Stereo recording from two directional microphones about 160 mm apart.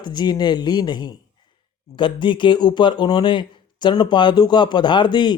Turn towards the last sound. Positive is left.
turn(degrees=30)  # may be behind; listen again after turning